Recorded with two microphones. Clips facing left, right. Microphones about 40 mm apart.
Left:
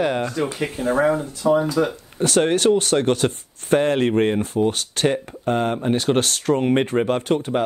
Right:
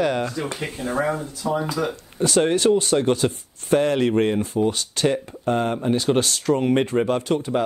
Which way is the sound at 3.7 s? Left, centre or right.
Left.